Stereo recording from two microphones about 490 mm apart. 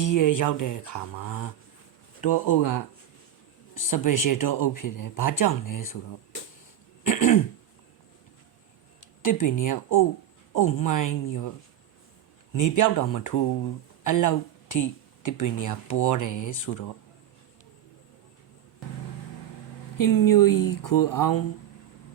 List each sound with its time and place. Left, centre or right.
0.0 s speech: left
7.0 s throat clearing: left
9.2 s speech: left
12.5 s speech: left
20.0 s speech: left